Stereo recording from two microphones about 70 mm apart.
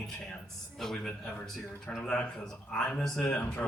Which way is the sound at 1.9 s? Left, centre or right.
Centre.